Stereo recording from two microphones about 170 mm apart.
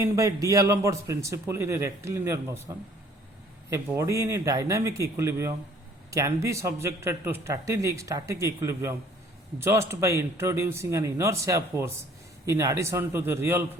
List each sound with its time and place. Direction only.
0.0 s a man's voice: 20° right (ahead or behind)